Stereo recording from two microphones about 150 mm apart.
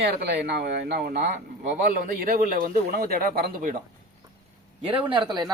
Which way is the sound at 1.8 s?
75° right (ahead or behind).